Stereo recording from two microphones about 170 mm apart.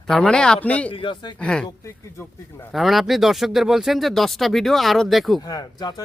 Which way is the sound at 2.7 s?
Centre (ahead or behind).